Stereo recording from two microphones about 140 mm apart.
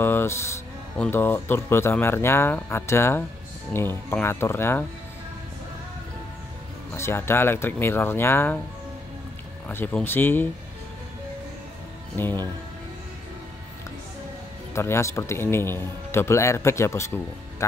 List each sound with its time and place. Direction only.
0.0 s speech: 15° left (ahead or behind)
7.0 s speech: 15° left (ahead or behind)
9.7 s speech: 15° left (ahead or behind)
12.2 s speech: 15° left (ahead or behind)
14.7 s a man's voice: 20° left (ahead or behind)